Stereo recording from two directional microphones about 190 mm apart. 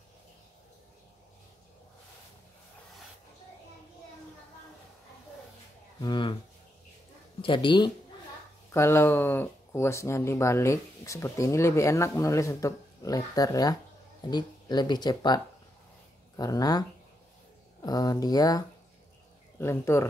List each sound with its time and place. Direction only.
5.9 s speech: 25° left (ahead or behind)
7.4 s speech: 25° left (ahead or behind)
8.7 s speech: 15° left (ahead or behind)
17.8 s speech: 20° left (ahead or behind)
19.6 s speech: 15° left (ahead or behind)